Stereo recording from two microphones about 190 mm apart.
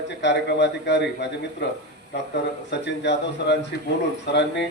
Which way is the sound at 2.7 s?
65° left (ahead or behind).